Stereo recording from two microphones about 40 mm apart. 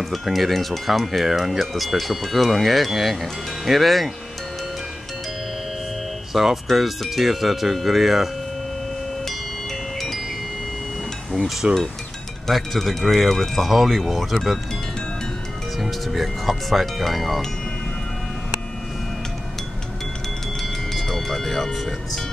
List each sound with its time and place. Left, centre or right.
0.0 s speech: centre
6.3 s speech: centre
9.9 s music: centre
11.6 s a sound: centre
12.4 s speech: centre
15.8 s speech: centre
20.9 s music: centre